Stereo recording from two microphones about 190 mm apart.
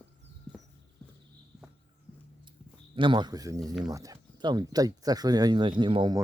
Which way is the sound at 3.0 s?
25° right (ahead or behind).